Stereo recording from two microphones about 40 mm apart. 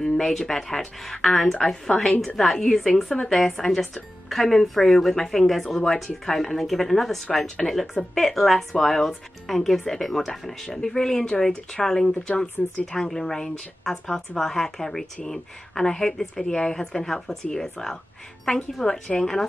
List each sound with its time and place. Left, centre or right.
0.0 s speech: centre